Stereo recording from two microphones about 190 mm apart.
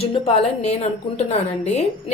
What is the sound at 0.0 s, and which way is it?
A woman's voice, 30° left (ahead or behind).